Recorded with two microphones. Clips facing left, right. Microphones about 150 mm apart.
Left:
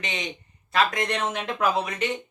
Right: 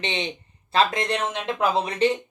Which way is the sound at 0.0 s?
30° right (ahead or behind).